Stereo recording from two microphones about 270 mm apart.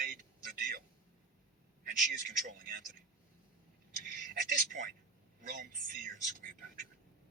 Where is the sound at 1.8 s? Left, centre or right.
Right.